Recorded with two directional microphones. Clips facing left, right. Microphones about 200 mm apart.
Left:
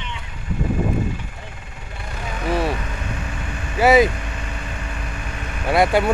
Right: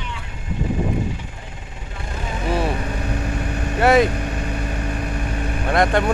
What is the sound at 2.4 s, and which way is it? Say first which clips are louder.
Vehicle: left 1 dB; centre (ahead or behind).